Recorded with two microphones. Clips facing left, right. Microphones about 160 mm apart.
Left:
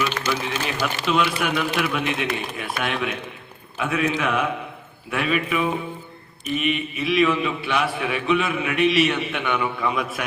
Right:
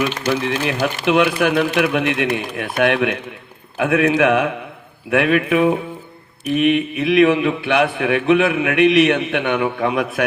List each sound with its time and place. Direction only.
0.3 s a man's voice: 65° right (ahead or behind)